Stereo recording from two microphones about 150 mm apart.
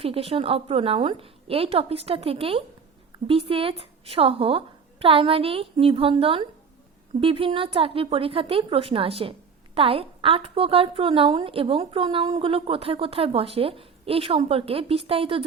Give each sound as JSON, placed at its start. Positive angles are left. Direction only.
{"t": 0.0, "sound": "a woman's voice", "side_deg": -40}